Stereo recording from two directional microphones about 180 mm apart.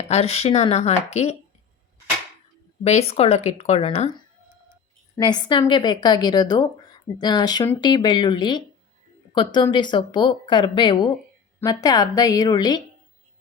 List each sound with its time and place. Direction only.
0.1 s speech: 35° left (ahead or behind)
2.8 s speech: 35° left (ahead or behind)
5.1 s a woman's voice: 25° left (ahead or behind)